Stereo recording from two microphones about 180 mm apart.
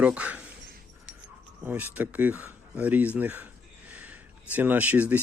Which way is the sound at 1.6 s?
10° right (ahead or behind).